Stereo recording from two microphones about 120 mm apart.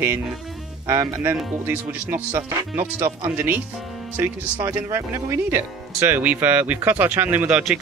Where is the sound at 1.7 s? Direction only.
20° right (ahead or behind).